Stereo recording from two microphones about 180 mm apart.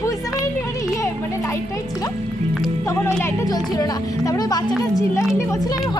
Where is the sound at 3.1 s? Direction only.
15° left (ahead or behind).